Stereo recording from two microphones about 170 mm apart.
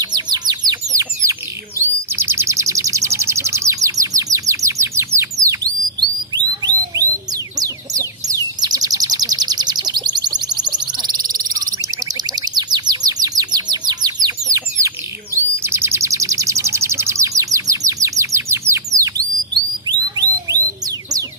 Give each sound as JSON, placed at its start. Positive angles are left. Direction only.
{"t": 0.0, "sound": "bird", "side_deg": -25}
{"t": 7.6, "sound": "chicken", "side_deg": -20}
{"t": 12.4, "sound": "bird", "side_deg": -25}
{"t": 19.9, "sound": "a sound", "side_deg": -25}